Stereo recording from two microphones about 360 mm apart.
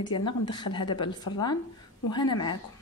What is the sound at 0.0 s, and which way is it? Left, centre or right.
A woman's voice, centre.